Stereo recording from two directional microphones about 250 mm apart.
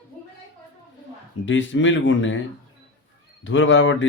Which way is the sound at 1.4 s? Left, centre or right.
Left.